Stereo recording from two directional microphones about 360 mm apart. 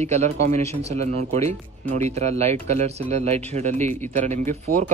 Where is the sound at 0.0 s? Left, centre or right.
Centre.